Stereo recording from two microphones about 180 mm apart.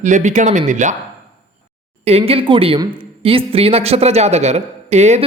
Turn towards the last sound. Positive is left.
turn(degrees=-40)  # may be behind; listen again after turning